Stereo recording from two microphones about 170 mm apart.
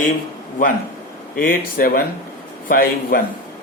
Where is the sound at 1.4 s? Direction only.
60° left (ahead or behind).